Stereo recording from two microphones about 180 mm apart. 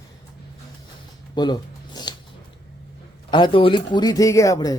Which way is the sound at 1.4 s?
25° left (ahead or behind).